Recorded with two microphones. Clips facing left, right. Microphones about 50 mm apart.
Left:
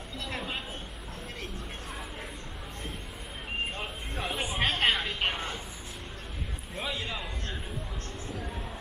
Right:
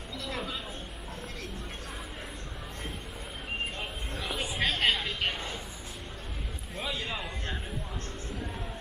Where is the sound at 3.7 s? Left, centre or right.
Left.